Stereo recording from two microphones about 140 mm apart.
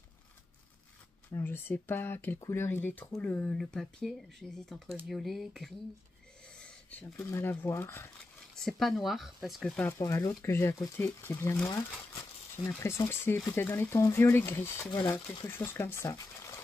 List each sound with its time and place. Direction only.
1.3 s speech: 15° left (ahead or behind)
8.6 s speech: centre (ahead or behind)
9.9 s speech: 25° left (ahead or behind)
12.6 s speech: 20° left (ahead or behind)
14.9 s speech: 30° left (ahead or behind)
15.5 s speech: 15° left (ahead or behind)